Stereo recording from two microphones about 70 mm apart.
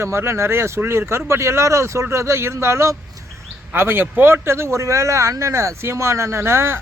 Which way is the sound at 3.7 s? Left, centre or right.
Right.